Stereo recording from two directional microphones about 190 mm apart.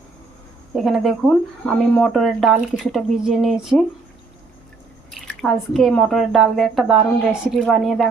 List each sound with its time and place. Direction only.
0.8 s speech: centre (ahead or behind)
5.4 s speech: centre (ahead or behind)